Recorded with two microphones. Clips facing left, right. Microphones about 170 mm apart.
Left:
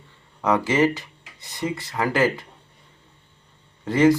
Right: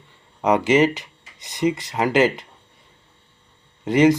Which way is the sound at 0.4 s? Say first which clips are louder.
Right 3 dB; 20° right (ahead or behind).